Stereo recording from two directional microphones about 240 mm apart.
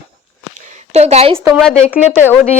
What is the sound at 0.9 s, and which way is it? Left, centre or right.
Speech, right.